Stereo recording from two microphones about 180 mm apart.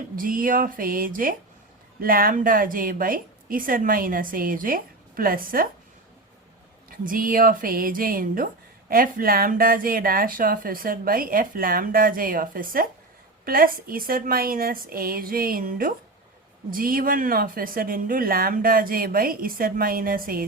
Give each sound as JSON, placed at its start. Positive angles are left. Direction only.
{"t": 0.2, "sound": "speech", "side_deg": -50}
{"t": 6.9, "sound": "speech", "side_deg": -50}